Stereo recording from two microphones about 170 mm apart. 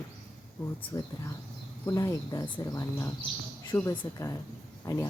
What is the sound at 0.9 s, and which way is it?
Speech, 20° left (ahead or behind).